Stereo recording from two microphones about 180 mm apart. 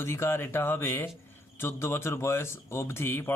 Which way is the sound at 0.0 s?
15° left (ahead or behind).